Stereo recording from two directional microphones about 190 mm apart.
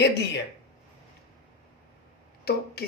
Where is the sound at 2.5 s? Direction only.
55° left (ahead or behind).